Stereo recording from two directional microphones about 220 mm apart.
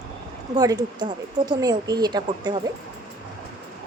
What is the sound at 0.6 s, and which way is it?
Speech, 15° right (ahead or behind).